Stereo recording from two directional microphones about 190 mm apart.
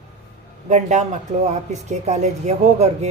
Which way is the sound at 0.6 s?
40° right (ahead or behind).